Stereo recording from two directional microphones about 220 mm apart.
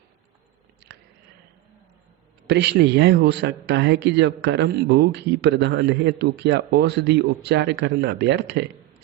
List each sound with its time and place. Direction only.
0.9 s chewing: 50° right (ahead or behind)
2.5 s a man's voice: 50° right (ahead or behind)